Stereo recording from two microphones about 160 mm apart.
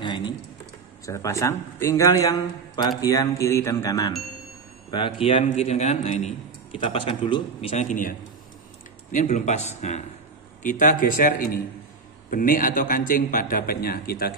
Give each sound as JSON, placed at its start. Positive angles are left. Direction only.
{"t": 0.0, "sound": "a sound", "side_deg": 30}
{"t": 1.0, "sound": "speech", "side_deg": 20}
{"t": 4.9, "sound": "a man's voice", "side_deg": 30}
{"t": 6.8, "sound": "a man's voice", "side_deg": 35}
{"t": 7.7, "sound": "a man's voice", "side_deg": 55}